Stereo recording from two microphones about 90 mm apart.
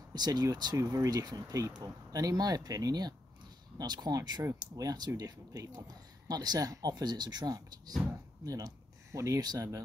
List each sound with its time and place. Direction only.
0.1 s speech: 50° right (ahead or behind)
0.7 s speech: 35° right (ahead or behind)